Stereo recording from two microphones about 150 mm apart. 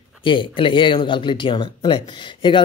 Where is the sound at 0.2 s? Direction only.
35° left (ahead or behind).